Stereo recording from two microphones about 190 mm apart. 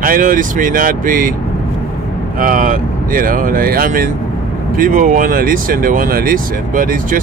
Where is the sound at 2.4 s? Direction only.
45° right (ahead or behind).